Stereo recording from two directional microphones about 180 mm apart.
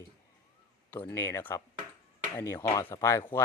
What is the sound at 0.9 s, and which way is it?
Speech, 15° left (ahead or behind).